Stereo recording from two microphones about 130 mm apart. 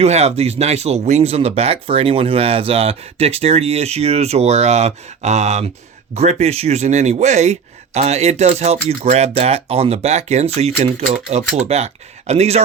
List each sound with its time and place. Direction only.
0.0 s speech: 55° right (ahead or behind)
11.0 s speech: 65° right (ahead or behind)